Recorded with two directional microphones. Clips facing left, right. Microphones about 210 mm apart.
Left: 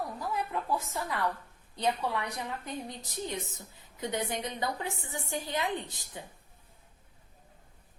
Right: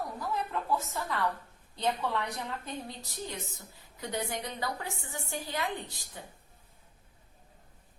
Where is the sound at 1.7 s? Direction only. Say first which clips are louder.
Left 1 dB; 15° left (ahead or behind).